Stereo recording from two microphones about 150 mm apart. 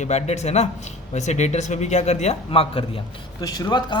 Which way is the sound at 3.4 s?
25° left (ahead or behind).